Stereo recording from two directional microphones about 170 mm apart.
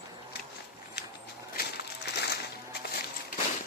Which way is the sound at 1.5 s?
75° left (ahead or behind).